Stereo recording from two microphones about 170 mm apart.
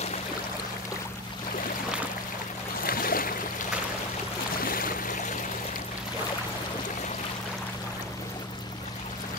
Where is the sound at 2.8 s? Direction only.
55° left (ahead or behind).